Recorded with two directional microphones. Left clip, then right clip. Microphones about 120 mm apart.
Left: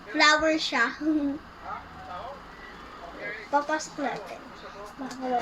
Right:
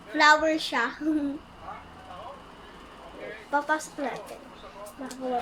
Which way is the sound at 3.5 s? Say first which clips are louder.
Even; 35° right (ahead or behind).